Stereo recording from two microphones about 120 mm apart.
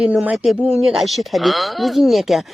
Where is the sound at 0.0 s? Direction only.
10° right (ahead or behind).